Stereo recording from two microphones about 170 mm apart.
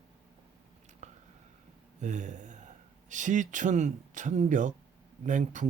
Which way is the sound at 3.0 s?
45° right (ahead or behind).